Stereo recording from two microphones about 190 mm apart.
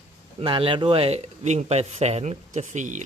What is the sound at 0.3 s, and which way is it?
Speech, 25° right (ahead or behind).